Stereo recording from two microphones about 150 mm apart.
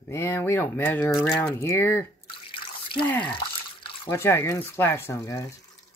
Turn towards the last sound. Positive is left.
turn(degrees=20)  # may be behind; listen again after turning